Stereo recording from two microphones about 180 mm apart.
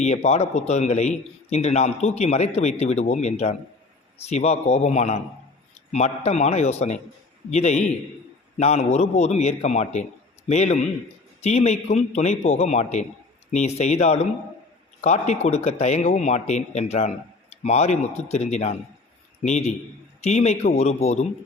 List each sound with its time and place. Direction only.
0.0 s a man's voice: 40° left (ahead or behind)